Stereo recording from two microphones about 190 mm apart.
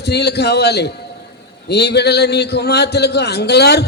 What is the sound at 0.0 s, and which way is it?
A man's voice, 60° left (ahead or behind).